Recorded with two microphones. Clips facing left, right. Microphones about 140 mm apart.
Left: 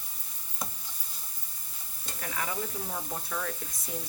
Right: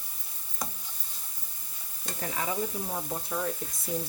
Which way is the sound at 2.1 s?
30° right (ahead or behind).